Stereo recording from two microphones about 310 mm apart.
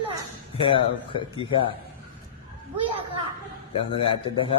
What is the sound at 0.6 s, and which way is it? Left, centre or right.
Speech, centre.